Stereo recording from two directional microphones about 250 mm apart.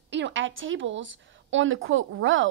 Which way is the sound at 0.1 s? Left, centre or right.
Right.